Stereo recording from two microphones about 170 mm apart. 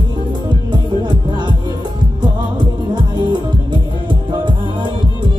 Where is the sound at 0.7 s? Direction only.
25° right (ahead or behind).